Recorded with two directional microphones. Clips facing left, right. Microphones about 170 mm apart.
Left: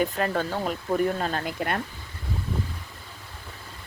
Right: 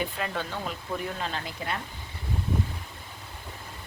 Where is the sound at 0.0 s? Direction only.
45° left (ahead or behind).